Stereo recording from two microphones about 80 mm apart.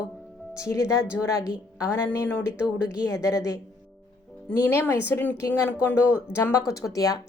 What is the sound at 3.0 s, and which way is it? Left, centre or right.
Speech, left.